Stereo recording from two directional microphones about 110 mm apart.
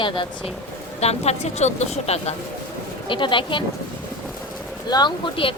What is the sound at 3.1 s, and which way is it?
Speech, 50° left (ahead or behind).